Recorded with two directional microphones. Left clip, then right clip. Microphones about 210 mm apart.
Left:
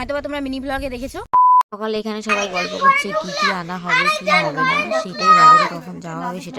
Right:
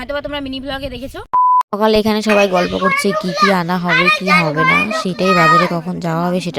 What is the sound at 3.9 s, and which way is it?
Speech, 40° right (ahead or behind).